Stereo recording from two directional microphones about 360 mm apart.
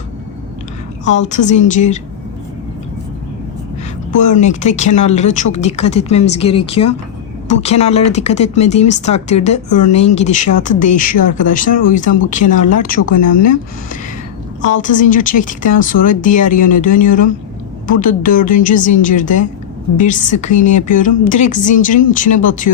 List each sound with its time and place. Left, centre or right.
1.0 s speech: centre
4.4 s speech: centre
14.8 s speech: left